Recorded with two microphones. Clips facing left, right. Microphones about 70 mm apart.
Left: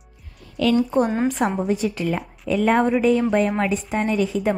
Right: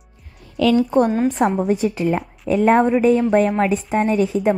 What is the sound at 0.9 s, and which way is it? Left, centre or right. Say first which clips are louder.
Speech: right 3 dB; centre.